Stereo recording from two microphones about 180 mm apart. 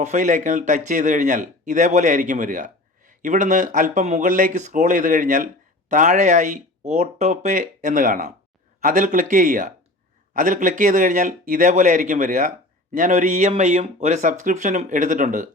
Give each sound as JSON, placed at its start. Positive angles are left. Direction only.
{"t": 0.0, "sound": "speech", "side_deg": -40}